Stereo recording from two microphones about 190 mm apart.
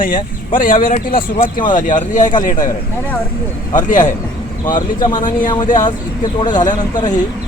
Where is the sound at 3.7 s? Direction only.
45° left (ahead or behind).